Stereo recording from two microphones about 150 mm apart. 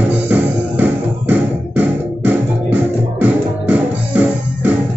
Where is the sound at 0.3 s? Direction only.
10° right (ahead or behind).